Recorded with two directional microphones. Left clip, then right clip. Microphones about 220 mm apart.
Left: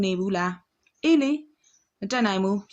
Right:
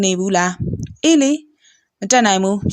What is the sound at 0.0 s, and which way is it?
Speech, 40° right (ahead or behind).